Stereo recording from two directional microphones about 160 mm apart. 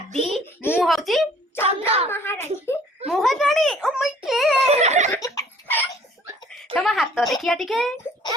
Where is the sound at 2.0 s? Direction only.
15° left (ahead or behind).